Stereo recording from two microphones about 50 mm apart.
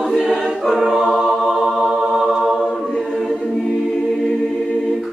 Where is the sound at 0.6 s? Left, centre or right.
Centre.